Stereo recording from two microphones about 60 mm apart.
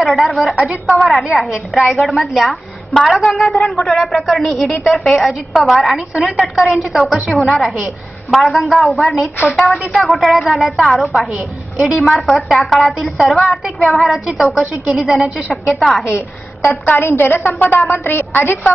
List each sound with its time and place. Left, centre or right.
0.0 s a woman's voice: centre
11.3 s a woman's voice: centre
12.0 s a woman's voice: centre
12.6 s a woman's voice: centre
16.6 s a woman's voice: left